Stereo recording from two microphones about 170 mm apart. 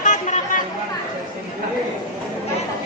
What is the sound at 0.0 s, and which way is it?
Chatter, 50° left (ahead or behind).